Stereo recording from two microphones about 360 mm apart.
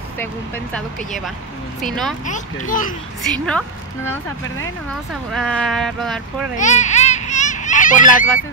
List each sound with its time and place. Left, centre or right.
0.7 s speech: centre
2.2 s speech: left
3.2 s a woman's voice: centre
6.5 s a sound: centre